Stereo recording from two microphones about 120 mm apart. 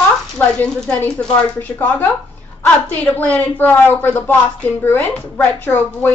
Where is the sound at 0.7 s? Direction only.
10° left (ahead or behind).